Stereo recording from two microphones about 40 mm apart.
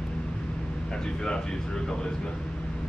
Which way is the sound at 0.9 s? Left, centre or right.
Centre.